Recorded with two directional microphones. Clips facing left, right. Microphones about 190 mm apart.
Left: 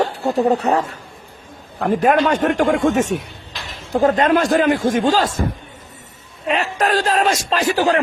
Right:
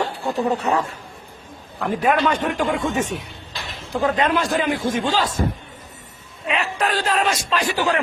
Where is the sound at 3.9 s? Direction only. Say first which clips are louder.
Left 5 dB; 45° left (ahead or behind).